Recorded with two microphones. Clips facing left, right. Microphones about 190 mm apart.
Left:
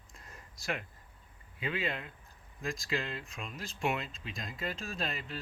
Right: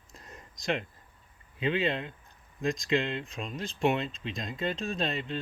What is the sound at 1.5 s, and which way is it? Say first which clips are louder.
Speech: right 7 dB; 30° right (ahead or behind).